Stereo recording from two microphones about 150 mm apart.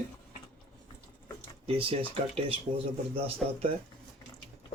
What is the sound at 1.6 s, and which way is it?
Speech, 40° right (ahead or behind).